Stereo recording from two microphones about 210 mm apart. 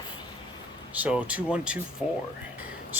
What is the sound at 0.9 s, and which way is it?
Speech, 5° right (ahead or behind).